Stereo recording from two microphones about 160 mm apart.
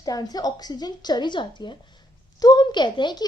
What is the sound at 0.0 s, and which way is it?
Speech, 25° left (ahead or behind).